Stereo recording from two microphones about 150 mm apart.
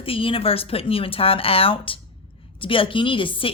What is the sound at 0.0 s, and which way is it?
A woman's voice, 35° left (ahead or behind).